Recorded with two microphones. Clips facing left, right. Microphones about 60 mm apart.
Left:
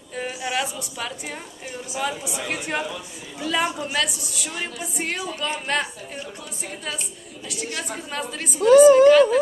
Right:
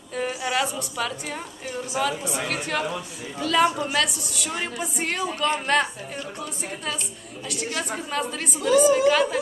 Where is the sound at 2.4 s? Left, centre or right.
Centre.